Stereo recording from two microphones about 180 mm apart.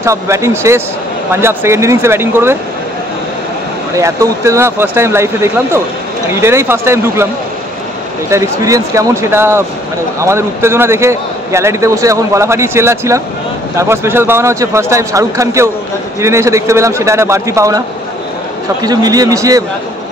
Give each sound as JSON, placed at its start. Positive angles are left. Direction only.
{"t": 0.0, "sound": "speech", "side_deg": -15}
{"t": 3.9, "sound": "speech", "side_deg": -15}
{"t": 8.3, "sound": "a man's voice", "side_deg": -15}